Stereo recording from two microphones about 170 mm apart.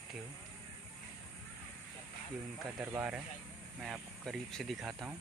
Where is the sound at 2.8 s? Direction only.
10° right (ahead or behind).